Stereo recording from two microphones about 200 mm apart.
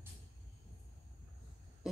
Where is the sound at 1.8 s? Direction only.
5° right (ahead or behind).